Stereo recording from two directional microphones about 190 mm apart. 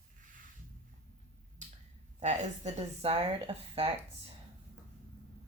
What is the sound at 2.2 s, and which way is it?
Speech, 35° right (ahead or behind).